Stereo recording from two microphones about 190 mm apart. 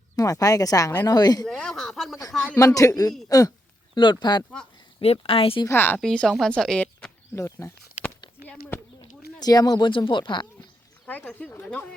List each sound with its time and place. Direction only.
0.2 s speech: 20° left (ahead or behind)
1.5 s speech: 5° left (ahead or behind)
2.6 s speech: 15° left (ahead or behind)
5.6 s speech: 10° left (ahead or behind)
9.4 s speech: 20° left (ahead or behind)
11.0 s speech: 5° left (ahead or behind)